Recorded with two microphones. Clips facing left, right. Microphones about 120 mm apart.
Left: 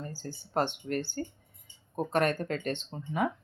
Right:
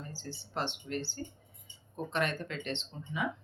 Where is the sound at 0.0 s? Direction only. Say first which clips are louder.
Left 4 dB; 45° left (ahead or behind).